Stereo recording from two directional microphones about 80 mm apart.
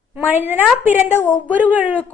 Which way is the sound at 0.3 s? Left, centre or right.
Right.